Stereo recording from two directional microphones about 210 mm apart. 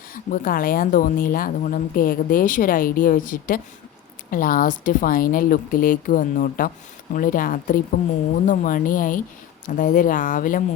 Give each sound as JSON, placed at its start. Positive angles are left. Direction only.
{"t": 0.1, "sound": "speech", "side_deg": 40}